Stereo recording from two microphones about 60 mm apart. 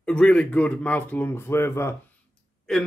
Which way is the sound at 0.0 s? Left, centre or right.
Centre.